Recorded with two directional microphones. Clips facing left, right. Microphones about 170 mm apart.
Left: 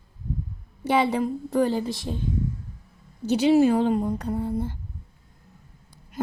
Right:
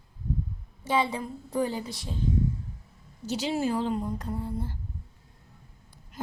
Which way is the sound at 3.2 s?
60° left (ahead or behind).